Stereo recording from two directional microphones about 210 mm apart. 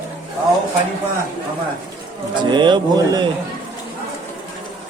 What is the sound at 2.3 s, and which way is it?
Speech, 20° right (ahead or behind).